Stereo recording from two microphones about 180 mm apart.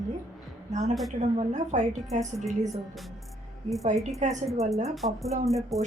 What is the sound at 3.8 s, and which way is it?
Speech, 40° right (ahead or behind).